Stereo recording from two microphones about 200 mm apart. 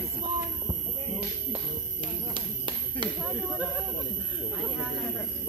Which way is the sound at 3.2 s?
5° right (ahead or behind).